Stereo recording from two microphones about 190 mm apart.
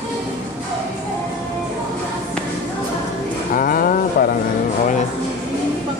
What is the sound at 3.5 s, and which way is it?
Music, 50° left (ahead or behind).